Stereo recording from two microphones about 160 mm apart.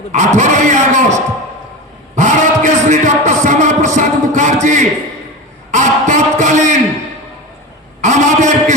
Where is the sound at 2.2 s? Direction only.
50° right (ahead or behind).